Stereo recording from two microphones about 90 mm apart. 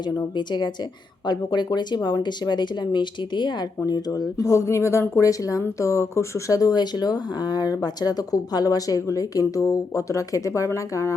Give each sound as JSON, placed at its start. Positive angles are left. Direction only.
{"t": 0.0, "sound": "speech", "side_deg": 55}
{"t": 3.8, "sound": "speech", "side_deg": 50}
{"t": 4.4, "sound": "speech", "side_deg": 35}